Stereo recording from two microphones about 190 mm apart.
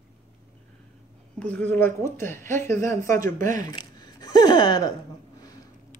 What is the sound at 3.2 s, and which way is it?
Speech, 45° right (ahead or behind).